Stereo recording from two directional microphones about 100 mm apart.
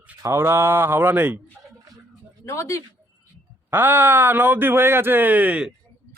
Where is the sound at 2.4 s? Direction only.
30° left (ahead or behind).